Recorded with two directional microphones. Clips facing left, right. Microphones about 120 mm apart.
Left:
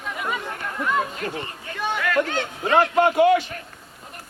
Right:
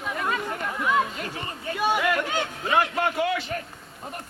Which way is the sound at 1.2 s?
40° left (ahead or behind).